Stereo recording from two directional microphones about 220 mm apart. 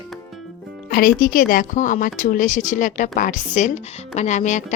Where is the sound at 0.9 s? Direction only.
40° left (ahead or behind).